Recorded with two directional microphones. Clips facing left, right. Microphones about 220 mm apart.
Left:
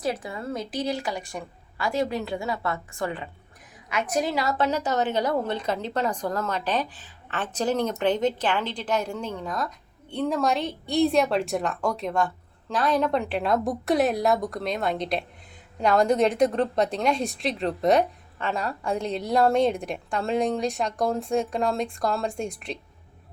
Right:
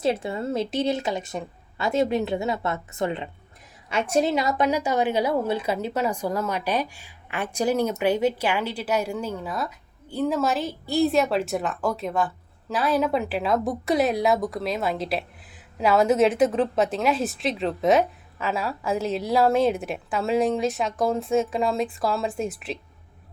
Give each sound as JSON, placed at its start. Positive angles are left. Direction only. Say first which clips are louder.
{"t": 0.0, "sound": "a woman's voice", "louder": "right 5 dB", "side_deg": -25}